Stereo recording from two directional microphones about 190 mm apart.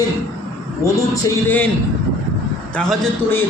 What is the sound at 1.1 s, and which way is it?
Speech, 10° left (ahead or behind).